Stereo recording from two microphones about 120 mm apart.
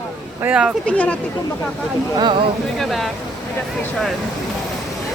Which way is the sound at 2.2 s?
40° right (ahead or behind).